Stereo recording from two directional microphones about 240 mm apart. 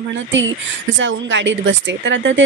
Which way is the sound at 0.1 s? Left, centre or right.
Right.